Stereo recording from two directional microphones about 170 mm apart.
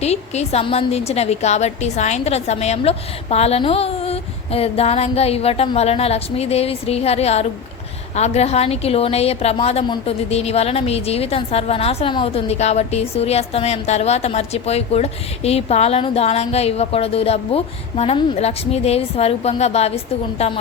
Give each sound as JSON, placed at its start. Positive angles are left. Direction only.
{"t": 0.0, "sound": "a woman's voice", "side_deg": 40}